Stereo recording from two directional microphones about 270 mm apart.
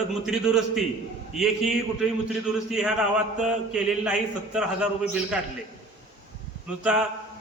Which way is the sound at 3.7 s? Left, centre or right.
Centre.